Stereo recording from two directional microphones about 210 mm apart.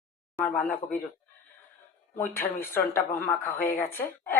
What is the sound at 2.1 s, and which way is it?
Speech, 10° left (ahead or behind).